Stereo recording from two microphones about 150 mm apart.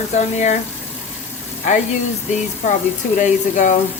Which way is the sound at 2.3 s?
55° left (ahead or behind).